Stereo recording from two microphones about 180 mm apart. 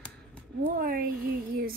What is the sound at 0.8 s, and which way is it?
Speech, 55° right (ahead or behind).